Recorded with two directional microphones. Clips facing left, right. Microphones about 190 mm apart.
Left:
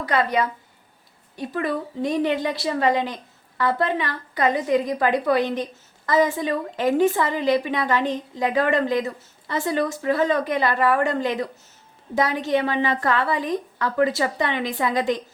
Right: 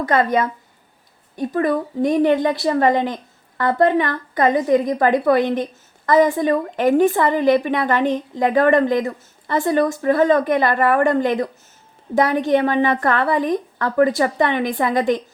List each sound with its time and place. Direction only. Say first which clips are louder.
0.0 s a woman's voice: right 4 dB; 50° right (ahead or behind)